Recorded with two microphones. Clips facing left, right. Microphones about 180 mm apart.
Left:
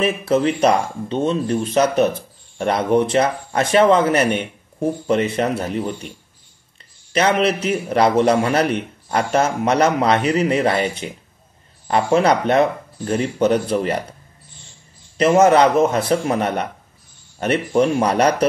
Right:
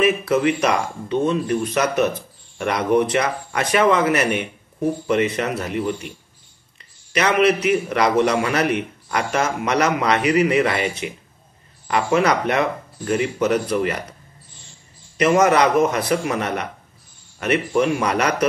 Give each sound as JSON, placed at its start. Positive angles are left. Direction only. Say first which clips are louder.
{"t": 0.0, "sound": "speech", "louder": "even", "side_deg": 30}
{"t": 7.1, "sound": "a man's voice", "louder": "even", "side_deg": 30}
{"t": 15.1, "sound": "a man's voice", "louder": "left 3 dB", "side_deg": 30}